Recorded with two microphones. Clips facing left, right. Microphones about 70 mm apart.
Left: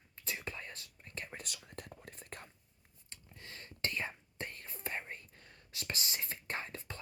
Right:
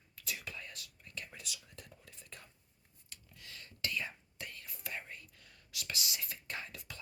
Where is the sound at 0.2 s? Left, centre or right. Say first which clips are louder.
Left 2 dB; left.